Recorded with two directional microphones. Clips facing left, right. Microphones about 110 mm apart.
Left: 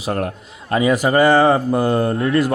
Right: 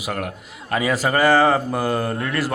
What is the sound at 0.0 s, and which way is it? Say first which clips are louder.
A man's voice: left 5 dB; 30° left (ahead or behind).